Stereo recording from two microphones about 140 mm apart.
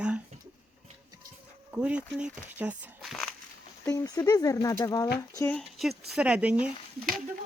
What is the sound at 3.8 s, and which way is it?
Speech, 25° left (ahead or behind).